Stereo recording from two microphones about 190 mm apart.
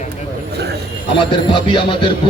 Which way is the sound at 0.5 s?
60° right (ahead or behind).